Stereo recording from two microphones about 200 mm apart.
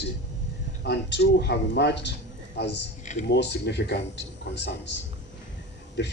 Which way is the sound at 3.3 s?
55° left (ahead or behind).